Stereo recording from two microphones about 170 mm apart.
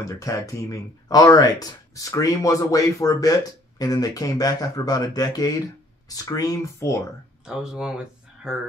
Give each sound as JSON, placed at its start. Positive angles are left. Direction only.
{"t": 0.2, "sound": "speech", "side_deg": 20}
{"t": 7.4, "sound": "speech", "side_deg": -5}